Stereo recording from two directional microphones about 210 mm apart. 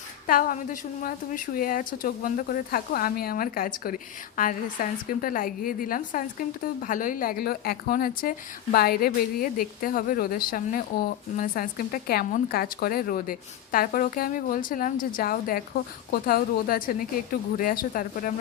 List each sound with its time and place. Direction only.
0.3 s a woman's voice: 40° left (ahead or behind)